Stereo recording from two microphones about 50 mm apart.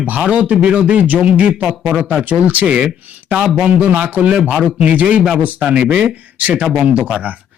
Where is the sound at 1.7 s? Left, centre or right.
Centre.